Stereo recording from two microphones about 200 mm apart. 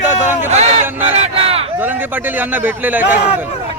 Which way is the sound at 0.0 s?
10° right (ahead or behind).